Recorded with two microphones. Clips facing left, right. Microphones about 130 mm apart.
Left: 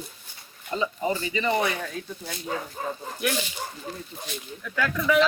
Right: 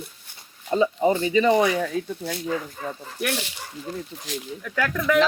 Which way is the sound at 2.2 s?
65° right (ahead or behind).